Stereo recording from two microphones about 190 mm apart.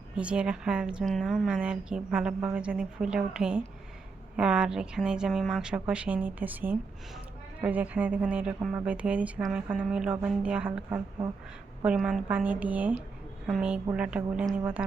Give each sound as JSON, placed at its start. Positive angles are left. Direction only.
{"t": 0.2, "sound": "a woman's voice", "side_deg": -5}
{"t": 11.9, "sound": "a woman's voice", "side_deg": 0}